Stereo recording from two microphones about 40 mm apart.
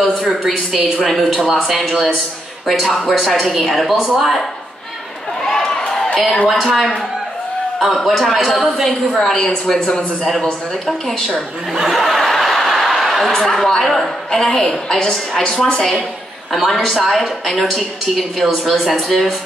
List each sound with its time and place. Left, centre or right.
1.0 s speech: centre
1.4 s a woman's voice: centre
3.4 s speech: centre
5.4 s run: centre
6.4 s speech: centre
8.8 s a woman's voice: centre
10.2 s a woman's voice: centre
11.7 s chuckle: centre
13.3 s a woman's voice: centre
16.5 s speech: centre